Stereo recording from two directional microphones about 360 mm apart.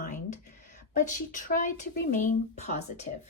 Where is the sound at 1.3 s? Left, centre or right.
Left.